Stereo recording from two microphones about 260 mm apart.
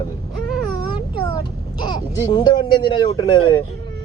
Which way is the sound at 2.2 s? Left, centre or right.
Centre.